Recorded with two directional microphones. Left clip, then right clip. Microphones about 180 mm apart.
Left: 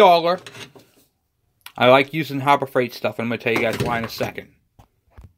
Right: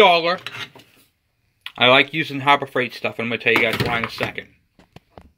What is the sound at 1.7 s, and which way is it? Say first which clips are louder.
Speech: even; 15° left (ahead or behind).